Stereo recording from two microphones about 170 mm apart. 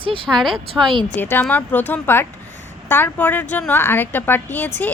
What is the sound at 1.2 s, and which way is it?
A woman's voice, 10° left (ahead or behind).